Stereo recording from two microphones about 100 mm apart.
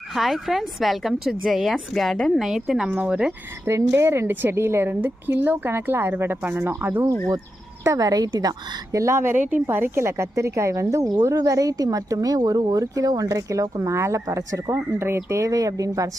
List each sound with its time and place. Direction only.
0.1 s speech: centre (ahead or behind)
3.7 s speech: 25° right (ahead or behind)
7.9 s a woman's voice: 35° right (ahead or behind)